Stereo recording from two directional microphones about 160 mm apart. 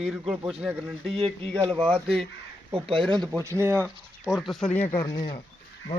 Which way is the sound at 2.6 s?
35° right (ahead or behind).